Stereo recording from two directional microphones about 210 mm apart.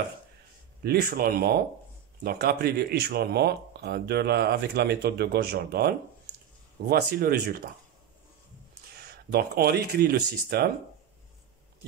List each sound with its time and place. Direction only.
0.8 s speech: 45° right (ahead or behind)
9.1 s speech: 50° right (ahead or behind)